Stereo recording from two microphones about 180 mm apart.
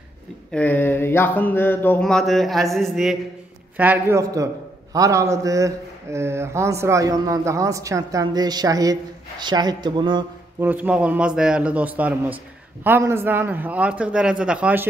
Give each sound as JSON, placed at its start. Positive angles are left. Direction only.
{"t": 0.5, "sound": "a sound", "side_deg": 10}
{"t": 3.7, "sound": "a man's voice", "side_deg": -10}
{"t": 10.6, "sound": "a man's voice", "side_deg": -10}